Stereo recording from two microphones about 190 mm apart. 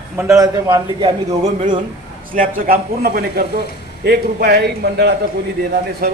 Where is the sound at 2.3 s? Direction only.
45° right (ahead or behind).